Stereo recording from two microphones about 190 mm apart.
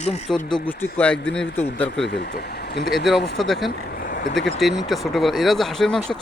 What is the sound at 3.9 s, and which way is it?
Vehicle, 50° left (ahead or behind).